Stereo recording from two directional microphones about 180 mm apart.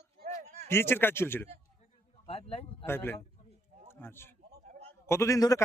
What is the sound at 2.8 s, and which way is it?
A man's voice, 10° left (ahead or behind).